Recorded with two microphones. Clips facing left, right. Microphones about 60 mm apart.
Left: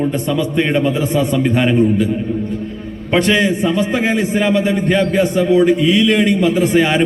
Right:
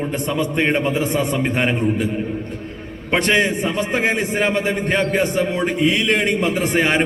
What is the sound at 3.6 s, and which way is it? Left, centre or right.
A man's voice, right.